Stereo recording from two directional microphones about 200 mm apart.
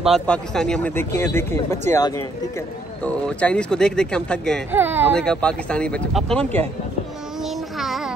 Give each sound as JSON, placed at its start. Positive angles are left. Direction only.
{"t": 0.0, "sound": "speech", "side_deg": 0}
{"t": 4.7, "sound": "speech", "side_deg": -10}
{"t": 5.1, "sound": "speech", "side_deg": 5}
{"t": 7.4, "sound": "child singing", "side_deg": 0}